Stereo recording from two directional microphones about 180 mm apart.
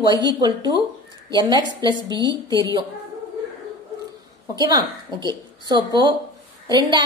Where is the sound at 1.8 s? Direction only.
25° right (ahead or behind).